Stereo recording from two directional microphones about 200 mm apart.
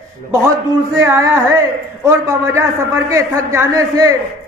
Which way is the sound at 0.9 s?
15° right (ahead or behind).